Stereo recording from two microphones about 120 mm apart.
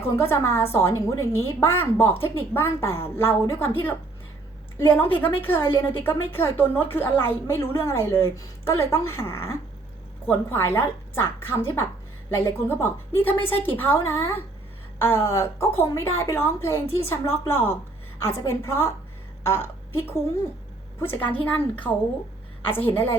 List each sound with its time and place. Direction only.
0.2 s a woman's voice: 20° left (ahead or behind)
5.1 s a woman's voice: 15° left (ahead or behind)